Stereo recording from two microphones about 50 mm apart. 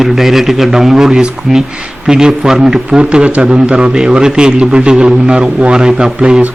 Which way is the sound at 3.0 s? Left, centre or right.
Right.